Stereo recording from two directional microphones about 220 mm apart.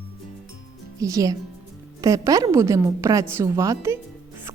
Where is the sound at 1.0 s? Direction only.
15° right (ahead or behind).